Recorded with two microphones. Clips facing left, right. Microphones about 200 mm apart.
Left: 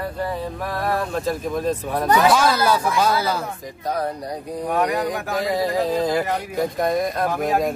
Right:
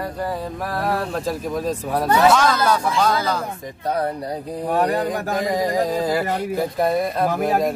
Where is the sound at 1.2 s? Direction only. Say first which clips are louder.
Left 1 dB; 10° right (ahead or behind).